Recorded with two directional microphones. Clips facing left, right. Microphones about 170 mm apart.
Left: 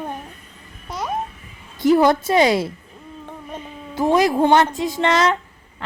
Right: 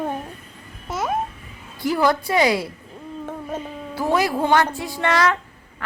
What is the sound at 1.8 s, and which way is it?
Speech, 25° left (ahead or behind).